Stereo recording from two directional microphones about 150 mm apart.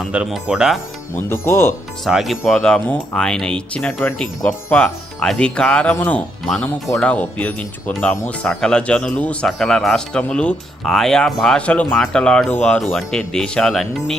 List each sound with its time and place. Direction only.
0.0 s speech: 5° right (ahead or behind)
1.3 s speech: 15° left (ahead or behind)
2.0 s speech: centre (ahead or behind)